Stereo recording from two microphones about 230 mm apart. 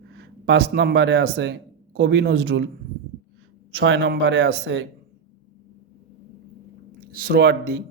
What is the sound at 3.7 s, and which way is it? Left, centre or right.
Speech, right.